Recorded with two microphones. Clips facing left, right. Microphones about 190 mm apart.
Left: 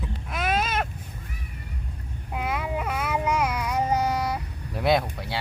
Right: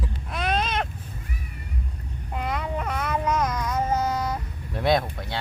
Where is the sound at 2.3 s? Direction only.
5° left (ahead or behind).